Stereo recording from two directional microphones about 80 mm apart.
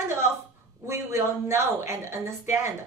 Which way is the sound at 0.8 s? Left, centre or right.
Right.